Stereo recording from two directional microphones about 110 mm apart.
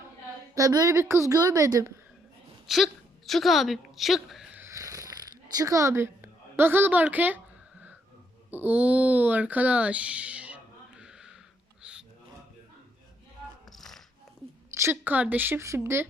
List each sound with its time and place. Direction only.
0.5 s a woman's voice: 30° right (ahead or behind)
2.6 s a woman's voice: centre (ahead or behind)
4.5 s a sound: 25° right (ahead or behind)
8.4 s speech: 15° right (ahead or behind)
11.0 s a sound: 5° right (ahead or behind)
11.8 s music: 10° right (ahead or behind)
13.7 s music: 5° left (ahead or behind)
14.8 s a woman's voice: 20° right (ahead or behind)